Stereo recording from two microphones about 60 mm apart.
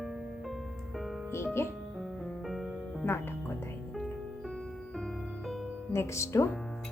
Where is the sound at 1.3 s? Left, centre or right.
Left.